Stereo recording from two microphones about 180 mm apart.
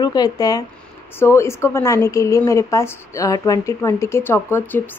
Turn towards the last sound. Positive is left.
turn(degrees=10)  # may be behind; listen again after turning